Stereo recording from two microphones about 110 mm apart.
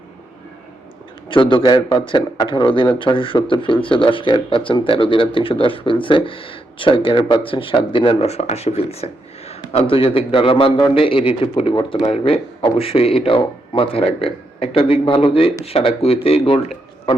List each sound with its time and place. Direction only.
1.3 s a man's voice: 50° left (ahead or behind)
11.7 s speech: 40° left (ahead or behind)
12.0 s speech: 65° left (ahead or behind)